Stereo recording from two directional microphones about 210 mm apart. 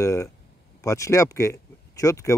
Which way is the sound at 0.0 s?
15° left (ahead or behind).